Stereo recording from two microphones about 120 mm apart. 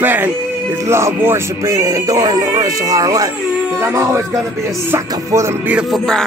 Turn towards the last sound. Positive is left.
turn(degrees=5)  # may be behind; listen again after turning